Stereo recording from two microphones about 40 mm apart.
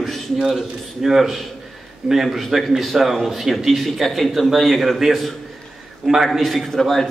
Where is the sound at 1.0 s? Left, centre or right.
Centre.